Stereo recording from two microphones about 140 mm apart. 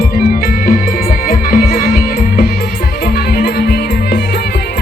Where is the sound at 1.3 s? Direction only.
90° left.